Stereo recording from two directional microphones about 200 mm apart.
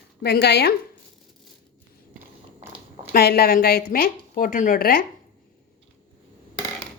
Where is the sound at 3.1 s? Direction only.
50° left (ahead or behind).